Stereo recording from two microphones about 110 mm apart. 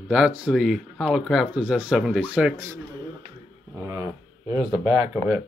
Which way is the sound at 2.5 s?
30° right (ahead or behind).